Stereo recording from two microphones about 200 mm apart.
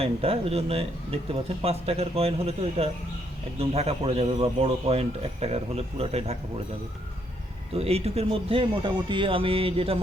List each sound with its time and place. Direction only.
0.0 s a man's voice: 30° right (ahead or behind)
7.7 s a man's voice: 30° right (ahead or behind)